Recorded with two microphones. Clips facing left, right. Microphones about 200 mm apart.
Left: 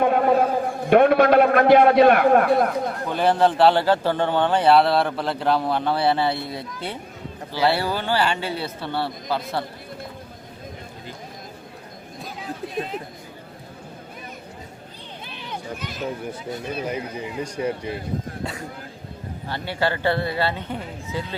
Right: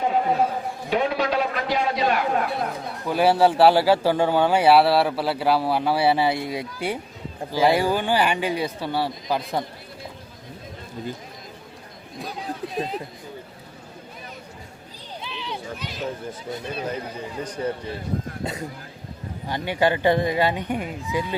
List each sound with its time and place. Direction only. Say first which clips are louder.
0.0 s a man's voice: left 4 dB; 60° left (ahead or behind)
3.1 s speech: right 2 dB; 5° right (ahead or behind)
12.2 s chatter: right 2 dB; centre (ahead or behind)
15.2 s a sound: right 1 dB; 50° left (ahead or behind)
16.8 s a man's voice: left 2 dB; 10° left (ahead or behind)
19.5 s speech: right 3 dB; 15° right (ahead or behind)